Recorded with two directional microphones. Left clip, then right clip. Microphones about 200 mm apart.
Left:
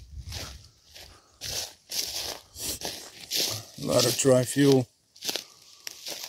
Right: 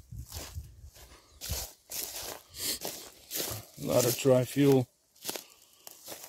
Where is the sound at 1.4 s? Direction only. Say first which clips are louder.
Left 6 dB; 25° left (ahead or behind).